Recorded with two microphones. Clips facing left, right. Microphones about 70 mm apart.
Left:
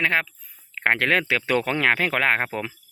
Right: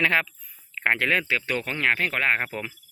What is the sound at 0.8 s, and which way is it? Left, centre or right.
Speech, left.